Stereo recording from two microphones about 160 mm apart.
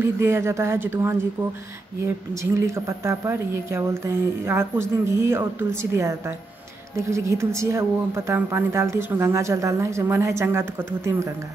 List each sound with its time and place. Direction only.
0.0 s speech: 15° right (ahead or behind)
2.5 s speech: 20° right (ahead or behind)